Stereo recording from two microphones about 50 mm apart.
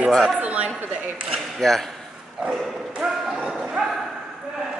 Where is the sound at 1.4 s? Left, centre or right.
Centre.